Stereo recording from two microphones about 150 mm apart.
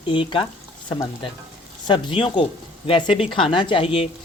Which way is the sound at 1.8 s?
30° left (ahead or behind).